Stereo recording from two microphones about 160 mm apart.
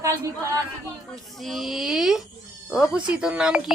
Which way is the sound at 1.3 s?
Centre (ahead or behind).